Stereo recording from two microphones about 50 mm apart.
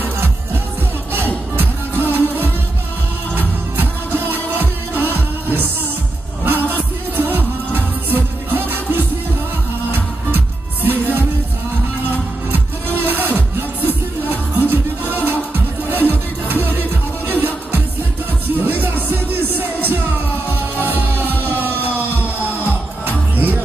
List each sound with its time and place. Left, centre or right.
1.1 s music: right
10.3 s music: right
12.4 s music: right